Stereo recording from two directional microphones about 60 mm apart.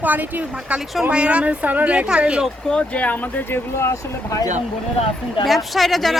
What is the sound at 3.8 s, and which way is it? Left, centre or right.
Speech, left.